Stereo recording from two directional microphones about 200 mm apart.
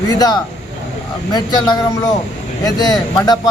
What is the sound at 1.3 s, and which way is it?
Speech, 20° left (ahead or behind).